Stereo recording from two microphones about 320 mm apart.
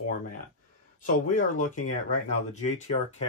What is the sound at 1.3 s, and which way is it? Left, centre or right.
Speech, left.